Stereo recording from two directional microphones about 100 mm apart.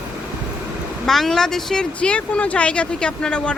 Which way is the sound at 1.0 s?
5° left (ahead or behind).